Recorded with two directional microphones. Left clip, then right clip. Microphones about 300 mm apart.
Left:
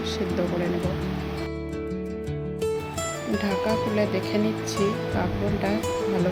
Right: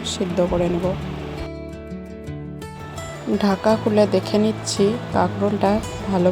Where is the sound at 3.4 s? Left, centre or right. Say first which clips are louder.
Right 6 dB; centre.